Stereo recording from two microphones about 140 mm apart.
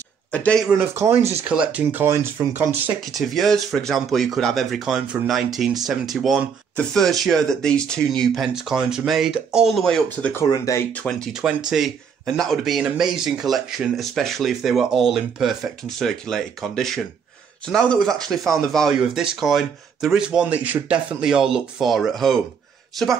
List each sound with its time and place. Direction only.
0.3 s speech: 10° left (ahead or behind)
0.7 s speech: 15° right (ahead or behind)
3.1 s speech: centre (ahead or behind)
10.0 s speech: 15° left (ahead or behind)
10.4 s speech: 25° left (ahead or behind)
10.9 s speech: 10° left (ahead or behind)
11.3 s speech: 5° right (ahead or behind)